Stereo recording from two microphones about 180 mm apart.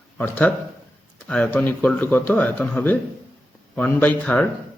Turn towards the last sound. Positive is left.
turn(degrees=5)  # may be behind; listen again after turning